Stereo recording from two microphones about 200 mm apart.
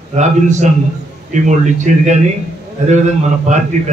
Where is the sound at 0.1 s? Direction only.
35° right (ahead or behind).